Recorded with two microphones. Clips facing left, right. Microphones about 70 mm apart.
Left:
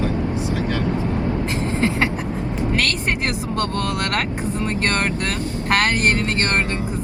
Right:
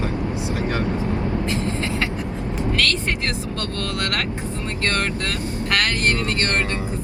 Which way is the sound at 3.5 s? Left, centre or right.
Left.